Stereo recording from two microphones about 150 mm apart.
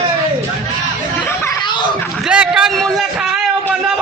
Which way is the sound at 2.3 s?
5° right (ahead or behind).